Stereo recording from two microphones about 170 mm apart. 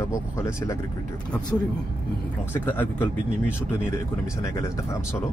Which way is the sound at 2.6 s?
10° left (ahead or behind).